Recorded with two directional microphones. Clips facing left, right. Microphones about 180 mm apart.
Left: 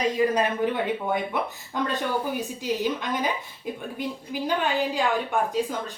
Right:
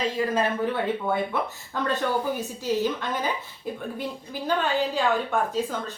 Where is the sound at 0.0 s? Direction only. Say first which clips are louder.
Left 2 dB; 15° left (ahead or behind).